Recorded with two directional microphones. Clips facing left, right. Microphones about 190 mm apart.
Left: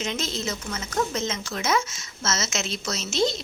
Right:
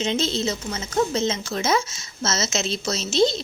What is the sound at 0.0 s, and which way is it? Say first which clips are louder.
A woman's voice: right 6 dB; 30° right (ahead or behind).